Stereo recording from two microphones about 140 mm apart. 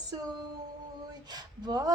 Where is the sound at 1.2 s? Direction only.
30° right (ahead or behind).